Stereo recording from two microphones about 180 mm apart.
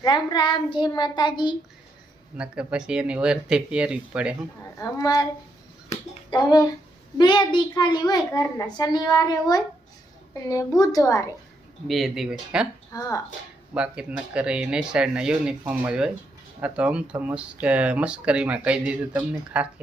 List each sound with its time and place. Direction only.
0.0 s a child's voice: 25° left (ahead or behind)
2.4 s speech: 5° right (ahead or behind)
4.8 s a child's voice: 20° left (ahead or behind)
10.8 s speech: 20° left (ahead or behind)
11.9 s speech: centre (ahead or behind)
12.9 s a child's voice: 20° left (ahead or behind)
13.7 s speech: 5° right (ahead or behind)